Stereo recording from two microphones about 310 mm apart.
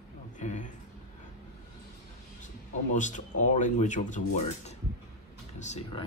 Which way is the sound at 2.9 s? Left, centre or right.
Left.